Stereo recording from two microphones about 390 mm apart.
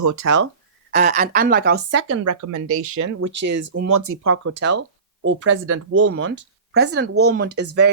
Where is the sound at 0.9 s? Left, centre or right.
Centre.